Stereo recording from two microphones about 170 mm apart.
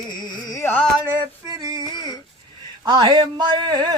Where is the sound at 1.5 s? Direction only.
20° right (ahead or behind).